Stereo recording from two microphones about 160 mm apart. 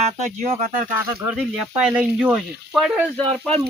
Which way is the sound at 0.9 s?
10° right (ahead or behind).